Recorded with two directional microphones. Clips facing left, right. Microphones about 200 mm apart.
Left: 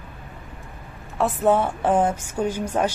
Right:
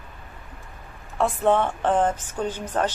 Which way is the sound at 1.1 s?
5° left (ahead or behind).